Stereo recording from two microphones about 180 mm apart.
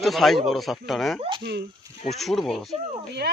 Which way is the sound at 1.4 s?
65° right (ahead or behind).